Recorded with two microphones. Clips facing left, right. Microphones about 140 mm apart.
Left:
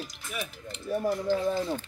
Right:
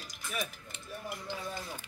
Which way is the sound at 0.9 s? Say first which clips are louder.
Left 14 dB; 60° left (ahead or behind).